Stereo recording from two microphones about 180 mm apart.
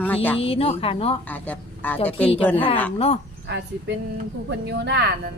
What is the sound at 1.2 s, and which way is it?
Speech, 10° left (ahead or behind).